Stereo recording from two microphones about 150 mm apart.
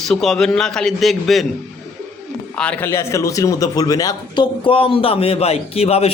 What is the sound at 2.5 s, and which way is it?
A man's voice, 10° left (ahead or behind).